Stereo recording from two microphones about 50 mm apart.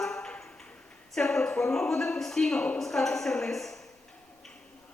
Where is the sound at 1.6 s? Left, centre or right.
Centre.